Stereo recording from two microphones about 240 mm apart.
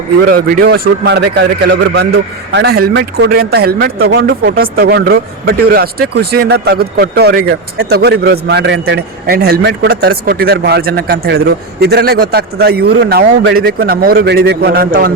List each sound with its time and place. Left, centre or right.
0.3 s a man's voice: right